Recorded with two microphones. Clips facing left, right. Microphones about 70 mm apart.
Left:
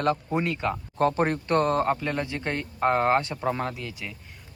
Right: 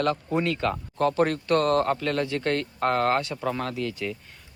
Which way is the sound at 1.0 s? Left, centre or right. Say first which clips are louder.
Even; left.